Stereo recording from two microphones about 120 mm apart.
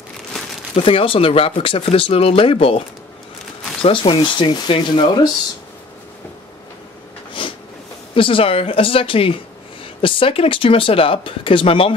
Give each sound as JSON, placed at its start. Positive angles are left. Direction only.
{"t": 0.7, "sound": "speech", "side_deg": 50}
{"t": 3.8, "sound": "speech", "side_deg": 50}
{"t": 7.4, "sound": "a sound", "side_deg": 45}
{"t": 8.1, "sound": "speech", "side_deg": 45}